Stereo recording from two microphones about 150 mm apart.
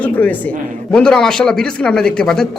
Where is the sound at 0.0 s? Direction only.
10° left (ahead or behind).